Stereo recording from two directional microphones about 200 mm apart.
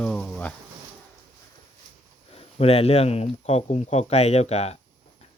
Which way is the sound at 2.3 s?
30° left (ahead or behind).